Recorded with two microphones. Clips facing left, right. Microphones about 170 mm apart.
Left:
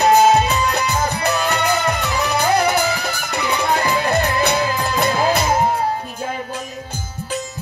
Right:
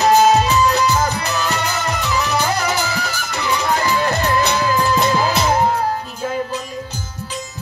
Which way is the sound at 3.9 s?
55° left (ahead or behind).